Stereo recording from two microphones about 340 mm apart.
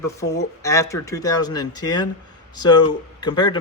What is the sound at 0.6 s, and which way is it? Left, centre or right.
Speech, centre.